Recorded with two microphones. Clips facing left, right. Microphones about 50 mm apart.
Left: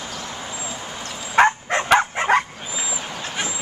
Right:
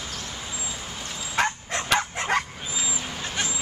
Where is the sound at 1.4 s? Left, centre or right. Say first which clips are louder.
Left 9 dB; left.